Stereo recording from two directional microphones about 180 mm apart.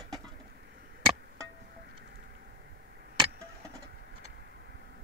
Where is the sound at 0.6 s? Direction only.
65° right (ahead or behind).